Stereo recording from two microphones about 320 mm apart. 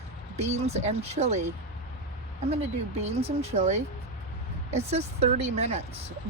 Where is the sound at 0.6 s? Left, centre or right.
Right.